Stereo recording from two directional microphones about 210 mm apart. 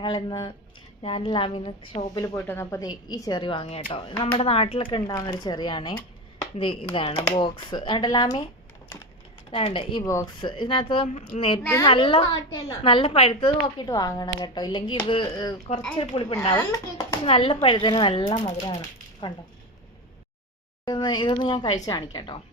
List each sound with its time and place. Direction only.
0.0 s a woman's voice: 20° left (ahead or behind)
2.3 s a woman's voice: 10° left (ahead or behind)
9.5 s a woman's voice: 25° left (ahead or behind)
20.8 s a woman's voice: 20° left (ahead or behind)